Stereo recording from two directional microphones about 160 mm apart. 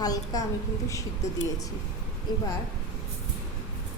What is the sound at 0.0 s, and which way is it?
Speech, 25° left (ahead or behind).